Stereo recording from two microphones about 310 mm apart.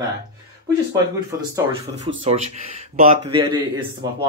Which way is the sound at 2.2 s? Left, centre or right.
Right.